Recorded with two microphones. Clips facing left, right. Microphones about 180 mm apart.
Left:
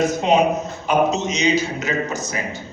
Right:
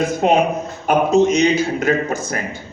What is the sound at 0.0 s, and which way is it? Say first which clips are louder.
A man's voice: right 1 dB; 55° right (ahead or behind).